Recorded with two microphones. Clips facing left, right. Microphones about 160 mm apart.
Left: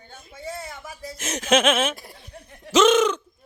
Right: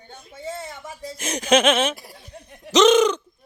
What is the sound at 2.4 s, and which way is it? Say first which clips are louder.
Laughter: right 2 dB; 15° right (ahead or behind).